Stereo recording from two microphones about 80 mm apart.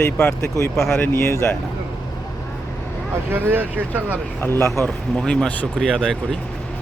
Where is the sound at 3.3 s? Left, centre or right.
Right.